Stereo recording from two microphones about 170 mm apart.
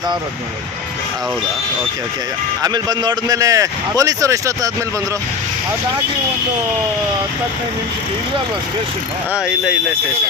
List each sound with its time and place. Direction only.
2.6 s a man's voice: 25° right (ahead or behind)